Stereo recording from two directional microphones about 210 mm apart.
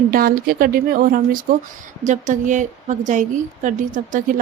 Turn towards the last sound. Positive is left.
turn(degrees=-40)  # may be behind; listen again after turning